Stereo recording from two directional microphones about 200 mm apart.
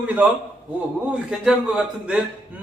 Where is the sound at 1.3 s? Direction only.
5° right (ahead or behind).